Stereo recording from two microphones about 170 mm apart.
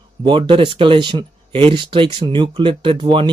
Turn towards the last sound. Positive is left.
turn(degrees=-30)  # may be behind; listen again after turning